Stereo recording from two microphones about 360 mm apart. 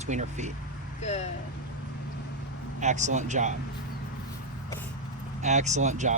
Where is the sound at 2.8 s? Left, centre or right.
Centre.